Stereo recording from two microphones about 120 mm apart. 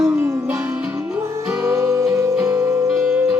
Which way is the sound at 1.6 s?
25° right (ahead or behind).